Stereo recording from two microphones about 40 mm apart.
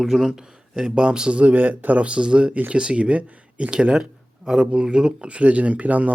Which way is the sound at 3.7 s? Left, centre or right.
Centre.